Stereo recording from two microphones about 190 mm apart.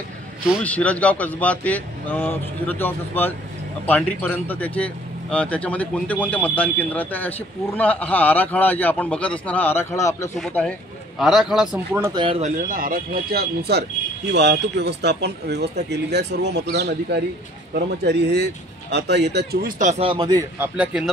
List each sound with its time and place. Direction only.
0.7 s speech: 5° left (ahead or behind)
10.4 s a man's voice: 5° left (ahead or behind)
12.1 s speech: 25° right (ahead or behind)
12.4 s speech: 40° right (ahead or behind)
19.9 s a man's voice: 30° right (ahead or behind); by 21.1 s 5° right (ahead or behind)